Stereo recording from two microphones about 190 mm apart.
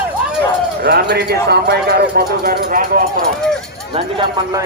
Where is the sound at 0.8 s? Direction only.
60° right (ahead or behind).